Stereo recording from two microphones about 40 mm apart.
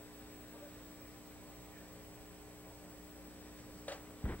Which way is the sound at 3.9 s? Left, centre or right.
Left.